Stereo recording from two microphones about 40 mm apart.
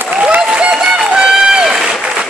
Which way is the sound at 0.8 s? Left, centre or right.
Right.